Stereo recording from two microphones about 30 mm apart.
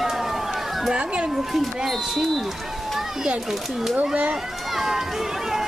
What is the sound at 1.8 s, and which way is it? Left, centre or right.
Speech, centre.